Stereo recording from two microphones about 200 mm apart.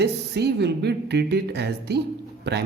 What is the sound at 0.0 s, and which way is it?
Speech, 55° right (ahead or behind).